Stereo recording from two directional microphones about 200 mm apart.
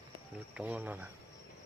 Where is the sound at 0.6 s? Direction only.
10° right (ahead or behind).